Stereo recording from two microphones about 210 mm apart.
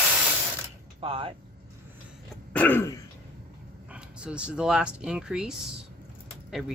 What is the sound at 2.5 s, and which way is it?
Throat clearing, 10° left (ahead or behind).